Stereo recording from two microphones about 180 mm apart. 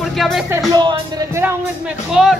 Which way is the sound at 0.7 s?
20° right (ahead or behind).